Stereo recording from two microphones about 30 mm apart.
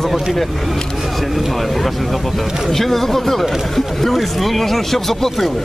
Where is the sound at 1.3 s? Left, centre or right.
Centre.